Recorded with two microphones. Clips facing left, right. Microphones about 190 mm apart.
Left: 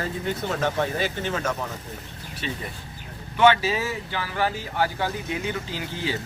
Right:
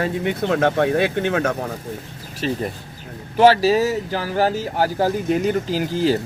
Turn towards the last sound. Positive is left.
turn(degrees=-40)  # may be behind; listen again after turning